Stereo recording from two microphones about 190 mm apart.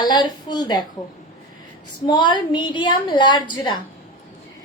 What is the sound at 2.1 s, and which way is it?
A woman's voice, 25° left (ahead or behind).